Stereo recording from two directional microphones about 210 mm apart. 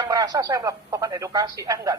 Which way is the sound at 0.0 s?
15° right (ahead or behind).